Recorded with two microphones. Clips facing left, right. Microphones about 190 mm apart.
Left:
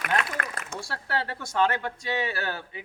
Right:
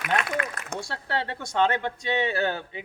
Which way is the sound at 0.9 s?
20° right (ahead or behind).